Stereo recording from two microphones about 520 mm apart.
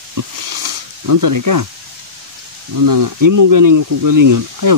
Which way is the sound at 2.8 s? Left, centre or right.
Right.